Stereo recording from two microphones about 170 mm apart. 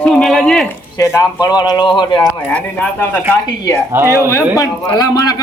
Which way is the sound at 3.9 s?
15° right (ahead or behind).